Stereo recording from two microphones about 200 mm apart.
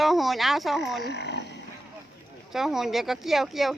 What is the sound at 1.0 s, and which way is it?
Frog, 60° left (ahead or behind).